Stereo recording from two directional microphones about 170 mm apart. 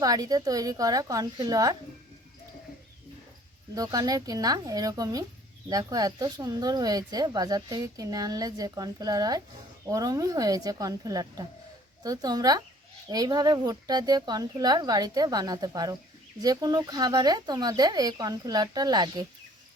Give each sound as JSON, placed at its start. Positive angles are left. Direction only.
{"t": 0.0, "sound": "speech", "side_deg": -20}
{"t": 3.8, "sound": "speech", "side_deg": -20}